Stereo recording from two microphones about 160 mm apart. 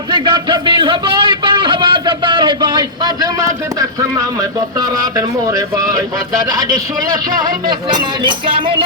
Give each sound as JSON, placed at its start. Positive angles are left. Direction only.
{"t": 0.1, "sound": "a man's voice", "side_deg": -30}